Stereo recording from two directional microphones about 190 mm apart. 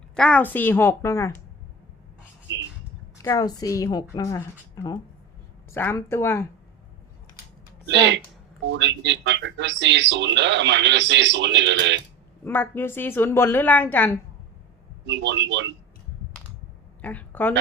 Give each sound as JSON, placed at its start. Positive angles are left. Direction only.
{"t": 0.2, "sound": "a woman's voice", "side_deg": 5}
{"t": 3.2, "sound": "a woman's voice", "side_deg": 15}
{"t": 7.9, "sound": "speech", "side_deg": -70}
{"t": 12.5, "sound": "a woman's voice", "side_deg": 10}
{"t": 15.0, "sound": "speech", "side_deg": -70}
{"t": 17.0, "sound": "a sound", "side_deg": 10}